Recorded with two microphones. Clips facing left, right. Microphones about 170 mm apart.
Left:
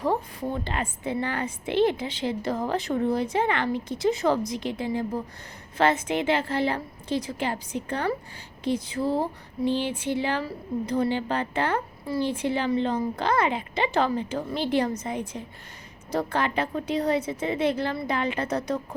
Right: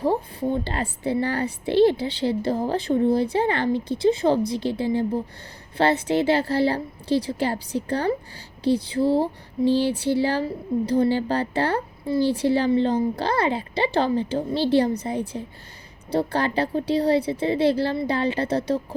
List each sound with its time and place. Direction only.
0.0 s a woman's voice: 30° right (ahead or behind)